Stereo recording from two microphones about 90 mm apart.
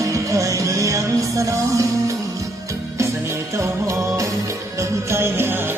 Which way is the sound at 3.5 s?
35° right (ahead or behind).